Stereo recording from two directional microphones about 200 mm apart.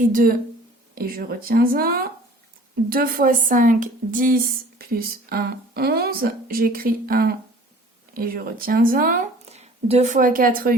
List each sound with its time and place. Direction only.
0.1 s a woman's voice: 45° right (ahead or behind)